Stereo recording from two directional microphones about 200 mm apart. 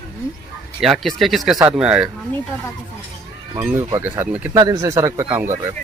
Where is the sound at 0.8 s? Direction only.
Centre (ahead or behind).